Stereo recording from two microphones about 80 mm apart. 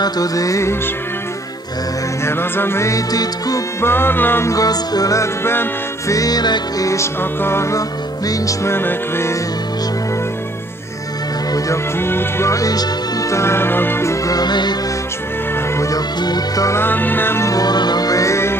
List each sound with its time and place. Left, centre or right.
0.0 s music: left
2.2 s music: left
3.8 s music: left
4.5 s music: left
6.1 s music: left
6.9 s music: left
8.3 s music: left
8.7 s music: left
12.0 s music: left
13.3 s music: left
14.2 s music: left
16.2 s music: left
16.7 s music: left
17.5 s music: left